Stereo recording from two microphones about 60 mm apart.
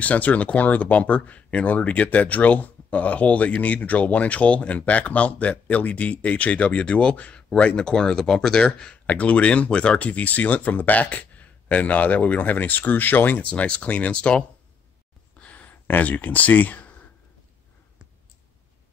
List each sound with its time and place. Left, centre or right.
0.0 s speech: left
13.4 s speech: centre
15.3 s a sound: left